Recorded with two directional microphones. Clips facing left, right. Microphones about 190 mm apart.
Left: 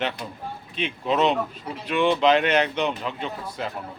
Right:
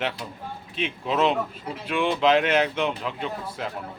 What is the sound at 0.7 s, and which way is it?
A man's voice, 5° right (ahead or behind).